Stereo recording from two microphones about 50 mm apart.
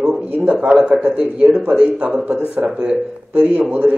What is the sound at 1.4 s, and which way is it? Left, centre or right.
A man's voice, centre.